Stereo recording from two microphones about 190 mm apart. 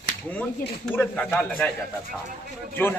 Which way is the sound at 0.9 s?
5° left (ahead or behind).